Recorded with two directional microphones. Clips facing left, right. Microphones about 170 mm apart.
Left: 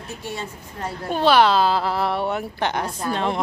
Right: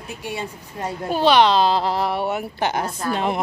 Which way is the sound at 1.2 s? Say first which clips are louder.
Right 1 dB; 5° left (ahead or behind).